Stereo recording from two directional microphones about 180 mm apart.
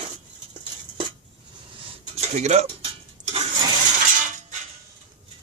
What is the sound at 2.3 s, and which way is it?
Cutlery, 40° right (ahead or behind).